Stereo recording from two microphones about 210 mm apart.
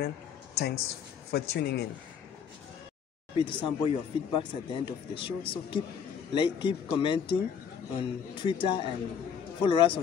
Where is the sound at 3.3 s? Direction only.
25° left (ahead or behind).